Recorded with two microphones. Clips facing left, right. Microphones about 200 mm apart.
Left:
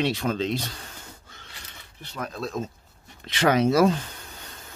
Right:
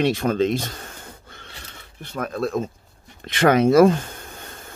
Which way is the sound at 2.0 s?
55° right (ahead or behind).